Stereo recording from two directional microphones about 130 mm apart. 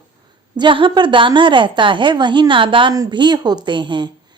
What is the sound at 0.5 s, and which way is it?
Speech, 40° right (ahead or behind).